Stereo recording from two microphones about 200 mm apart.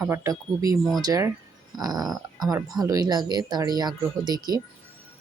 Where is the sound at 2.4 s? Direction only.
20° right (ahead or behind).